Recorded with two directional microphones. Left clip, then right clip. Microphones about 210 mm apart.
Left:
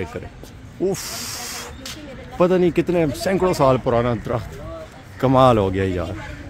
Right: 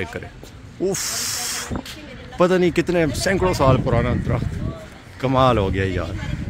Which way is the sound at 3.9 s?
20° left (ahead or behind).